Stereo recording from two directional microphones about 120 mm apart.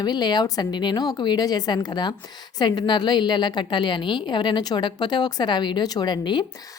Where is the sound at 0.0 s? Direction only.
35° left (ahead or behind).